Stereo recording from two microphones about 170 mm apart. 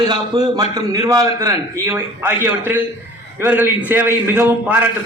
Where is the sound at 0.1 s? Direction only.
25° right (ahead or behind).